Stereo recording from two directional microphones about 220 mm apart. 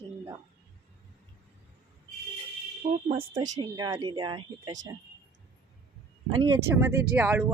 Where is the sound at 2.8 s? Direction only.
40° right (ahead or behind).